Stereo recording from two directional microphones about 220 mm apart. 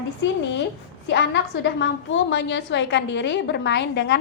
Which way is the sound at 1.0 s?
55° left (ahead or behind).